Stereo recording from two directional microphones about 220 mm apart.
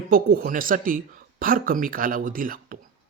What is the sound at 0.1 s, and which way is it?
Speech, 40° right (ahead or behind).